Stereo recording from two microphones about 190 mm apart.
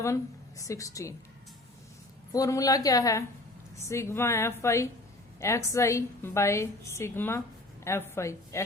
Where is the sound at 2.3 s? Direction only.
15° left (ahead or behind).